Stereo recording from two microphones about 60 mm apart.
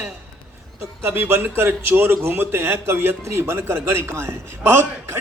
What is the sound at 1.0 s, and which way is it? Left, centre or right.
A man's voice, right.